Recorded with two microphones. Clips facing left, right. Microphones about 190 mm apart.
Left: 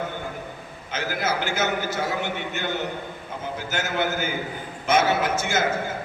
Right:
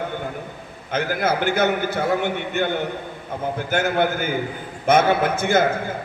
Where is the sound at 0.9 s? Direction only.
55° right (ahead or behind).